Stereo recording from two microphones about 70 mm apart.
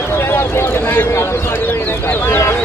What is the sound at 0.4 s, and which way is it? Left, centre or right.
Speech, left.